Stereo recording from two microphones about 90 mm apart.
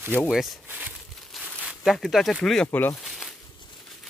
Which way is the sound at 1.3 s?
Centre (ahead or behind).